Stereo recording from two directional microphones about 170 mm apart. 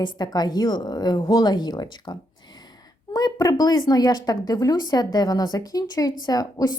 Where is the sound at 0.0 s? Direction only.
25° left (ahead or behind).